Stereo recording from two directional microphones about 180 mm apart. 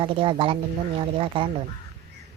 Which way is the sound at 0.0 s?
30° right (ahead or behind).